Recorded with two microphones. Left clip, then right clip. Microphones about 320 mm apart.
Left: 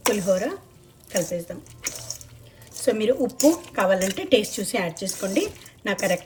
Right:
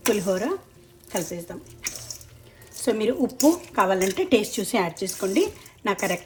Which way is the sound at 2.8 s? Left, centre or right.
Centre.